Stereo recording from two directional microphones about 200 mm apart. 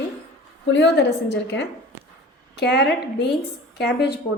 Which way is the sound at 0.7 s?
65° left (ahead or behind).